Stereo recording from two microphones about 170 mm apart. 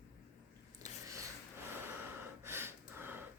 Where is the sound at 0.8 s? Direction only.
20° right (ahead or behind).